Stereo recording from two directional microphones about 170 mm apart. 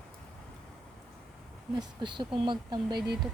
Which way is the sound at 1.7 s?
25° right (ahead or behind).